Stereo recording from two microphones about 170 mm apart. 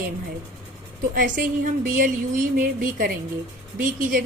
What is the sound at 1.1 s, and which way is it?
A woman's voice, 55° right (ahead or behind).